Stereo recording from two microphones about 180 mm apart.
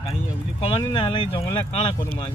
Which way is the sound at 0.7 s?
30° left (ahead or behind).